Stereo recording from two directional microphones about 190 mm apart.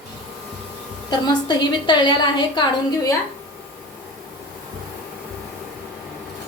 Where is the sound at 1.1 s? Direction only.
20° left (ahead or behind).